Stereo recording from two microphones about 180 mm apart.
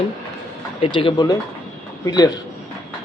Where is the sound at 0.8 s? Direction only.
30° left (ahead or behind).